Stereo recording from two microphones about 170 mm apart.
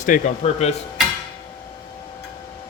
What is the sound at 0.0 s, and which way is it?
Speech, 45° left (ahead or behind).